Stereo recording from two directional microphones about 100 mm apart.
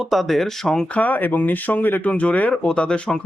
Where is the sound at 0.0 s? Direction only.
Centre (ahead or behind).